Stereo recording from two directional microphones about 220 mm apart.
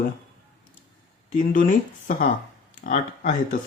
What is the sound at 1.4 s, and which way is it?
Speech, 35° left (ahead or behind).